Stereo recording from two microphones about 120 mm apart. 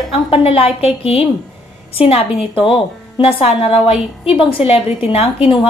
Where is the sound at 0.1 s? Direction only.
50° left (ahead or behind).